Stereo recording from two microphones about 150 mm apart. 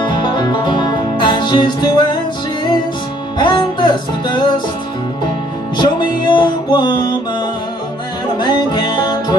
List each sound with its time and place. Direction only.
0.0 s music: 30° left (ahead or behind)
3.3 s music: 30° left (ahead or behind)
5.8 s music: 30° left (ahead or behind)
8.4 s music: 30° left (ahead or behind)